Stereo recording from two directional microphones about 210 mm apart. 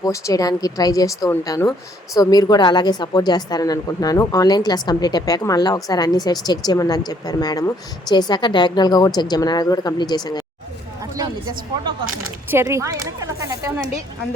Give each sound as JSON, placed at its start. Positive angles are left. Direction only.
{"t": 0.0, "sound": "a woman's voice", "side_deg": 15}
{"t": 11.0, "sound": "a sound", "side_deg": -15}
{"t": 12.5, "sound": "speech", "side_deg": -10}